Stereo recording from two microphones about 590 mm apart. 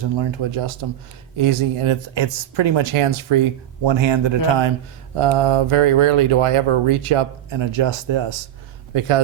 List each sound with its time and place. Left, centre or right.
0.0 s speech: right